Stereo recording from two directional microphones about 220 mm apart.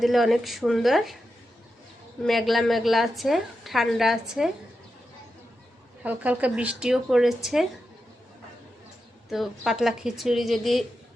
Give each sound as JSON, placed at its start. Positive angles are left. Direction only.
{"t": 0.0, "sound": "a woman's voice", "side_deg": 0}
{"t": 2.2, "sound": "a woman's voice", "side_deg": 0}
{"t": 6.0, "sound": "a woman's voice", "side_deg": -5}
{"t": 9.3, "sound": "a woman's voice", "side_deg": 0}